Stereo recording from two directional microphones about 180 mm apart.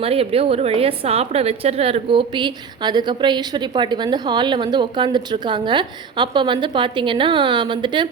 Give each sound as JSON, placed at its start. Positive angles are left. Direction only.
{"t": 0.0, "sound": "a woman's voice", "side_deg": -35}